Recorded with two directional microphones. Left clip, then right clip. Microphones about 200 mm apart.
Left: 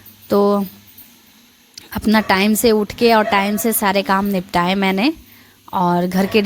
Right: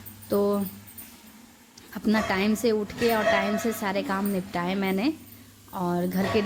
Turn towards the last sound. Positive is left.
turn(degrees=45)  # may be behind; listen again after turning